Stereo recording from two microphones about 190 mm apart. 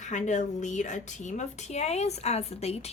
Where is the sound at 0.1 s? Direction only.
40° left (ahead or behind).